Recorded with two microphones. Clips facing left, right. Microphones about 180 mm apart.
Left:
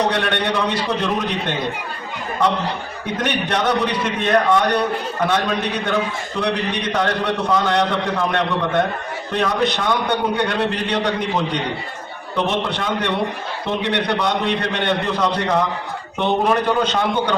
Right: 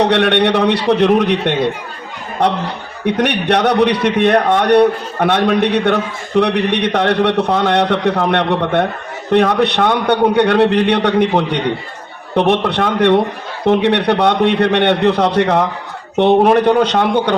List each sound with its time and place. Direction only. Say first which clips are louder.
0.0 s a man's voice: right 8 dB; 65° right (ahead or behind)
3.2 s a man's voice: right 6 dB; 70° right (ahead or behind)